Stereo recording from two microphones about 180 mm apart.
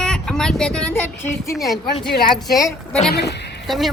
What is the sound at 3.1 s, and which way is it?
Speech, 70° left (ahead or behind).